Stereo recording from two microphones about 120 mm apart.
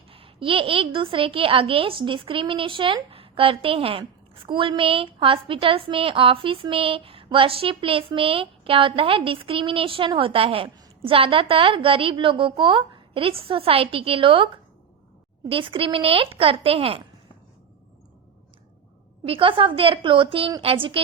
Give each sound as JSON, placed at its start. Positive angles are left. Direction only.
{"t": 0.1, "sound": "a woman's voice", "side_deg": -50}
{"t": 19.2, "sound": "a woman's voice", "side_deg": -50}